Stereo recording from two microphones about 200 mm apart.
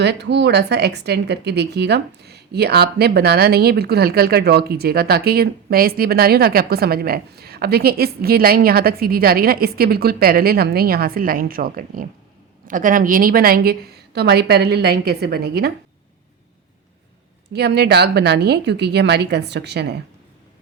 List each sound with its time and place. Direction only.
0.0 s speech: 60° right (ahead or behind)
17.5 s a woman's voice: 55° right (ahead or behind)